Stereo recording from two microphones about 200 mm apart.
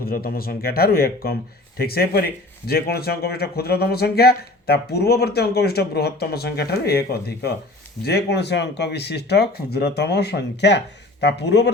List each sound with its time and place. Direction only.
0.0 s speech: 50° left (ahead or behind)